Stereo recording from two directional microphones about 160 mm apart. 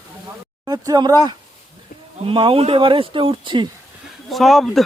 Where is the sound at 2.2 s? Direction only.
35° right (ahead or behind).